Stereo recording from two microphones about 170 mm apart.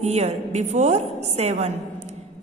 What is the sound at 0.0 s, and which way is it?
A woman's voice, 40° right (ahead or behind).